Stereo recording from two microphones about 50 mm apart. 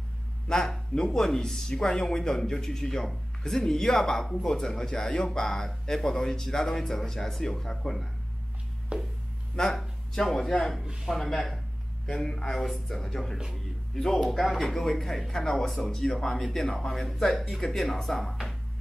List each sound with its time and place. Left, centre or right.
0.5 s speech: centre
8.9 s a sound: centre
9.6 s speech: centre